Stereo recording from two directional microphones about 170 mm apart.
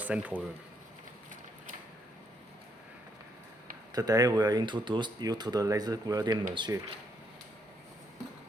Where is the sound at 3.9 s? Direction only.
20° right (ahead or behind).